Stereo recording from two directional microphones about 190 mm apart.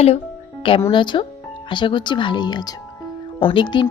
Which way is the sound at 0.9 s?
25° left (ahead or behind).